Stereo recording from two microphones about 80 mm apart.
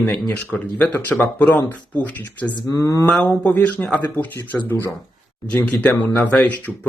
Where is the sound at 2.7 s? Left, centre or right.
Left.